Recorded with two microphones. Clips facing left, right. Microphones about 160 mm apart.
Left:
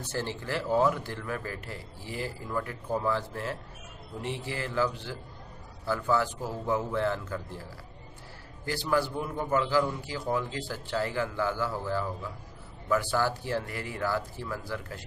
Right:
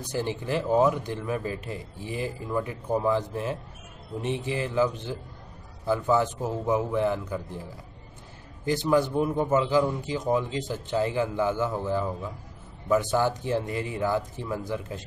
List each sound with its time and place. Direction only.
0.0 s a man's voice: 15° right (ahead or behind)
8.6 s a man's voice: 20° right (ahead or behind)